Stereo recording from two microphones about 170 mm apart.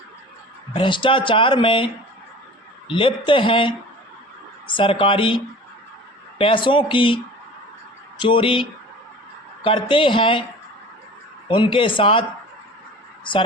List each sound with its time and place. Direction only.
0.7 s speech: 30° left (ahead or behind)
2.9 s speech: 30° left (ahead or behind)
6.4 s speech: 30° left (ahead or behind)
8.2 s speech: 30° left (ahead or behind)
9.6 s speech: 30° left (ahead or behind)
11.4 s speech: 30° left (ahead or behind)
13.3 s speech: 30° left (ahead or behind)